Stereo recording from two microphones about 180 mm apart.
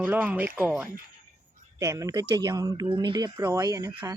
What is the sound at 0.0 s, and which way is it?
Speech, 10° right (ahead or behind).